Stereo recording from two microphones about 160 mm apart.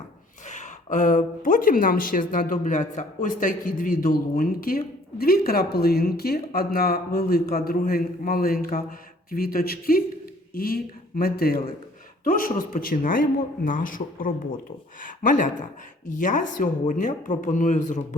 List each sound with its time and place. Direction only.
0.4 s speech: 50° left (ahead or behind); by 11.6 s 70° left (ahead or behind)
12.2 s speech: 60° left (ahead or behind)